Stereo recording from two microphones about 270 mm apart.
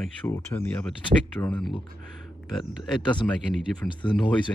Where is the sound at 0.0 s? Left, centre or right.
Centre.